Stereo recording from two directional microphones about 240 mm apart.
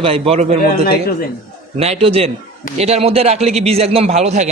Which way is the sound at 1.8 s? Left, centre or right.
Right.